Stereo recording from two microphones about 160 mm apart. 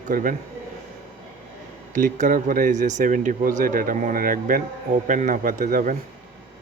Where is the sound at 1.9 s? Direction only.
55° right (ahead or behind).